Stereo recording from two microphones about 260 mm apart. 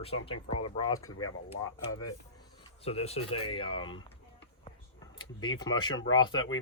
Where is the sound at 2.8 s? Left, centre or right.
Left.